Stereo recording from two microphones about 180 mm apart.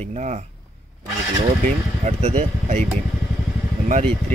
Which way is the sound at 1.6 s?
40° right (ahead or behind).